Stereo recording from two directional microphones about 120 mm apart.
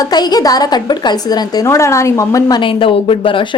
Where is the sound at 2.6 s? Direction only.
45° left (ahead or behind).